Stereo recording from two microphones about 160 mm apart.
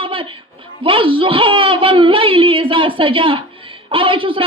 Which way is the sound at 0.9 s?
35° right (ahead or behind).